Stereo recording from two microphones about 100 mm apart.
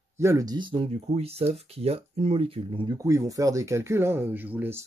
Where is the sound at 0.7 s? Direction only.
80° right.